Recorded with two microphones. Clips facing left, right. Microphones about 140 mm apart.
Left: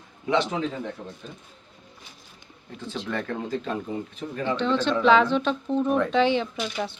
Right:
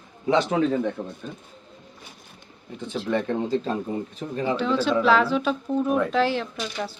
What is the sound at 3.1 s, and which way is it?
Speech, 20° right (ahead or behind).